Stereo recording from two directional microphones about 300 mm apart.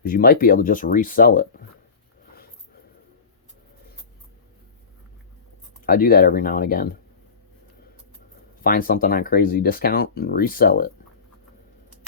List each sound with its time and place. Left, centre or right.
0.0 s speech: left
5.8 s speech: left
8.6 s speech: left